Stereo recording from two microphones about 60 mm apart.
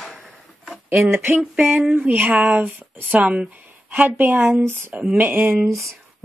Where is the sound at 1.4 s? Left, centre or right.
Centre.